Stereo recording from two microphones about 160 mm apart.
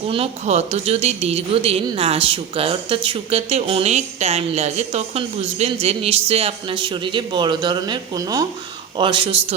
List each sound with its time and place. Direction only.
0.1 s speech: 40° right (ahead or behind)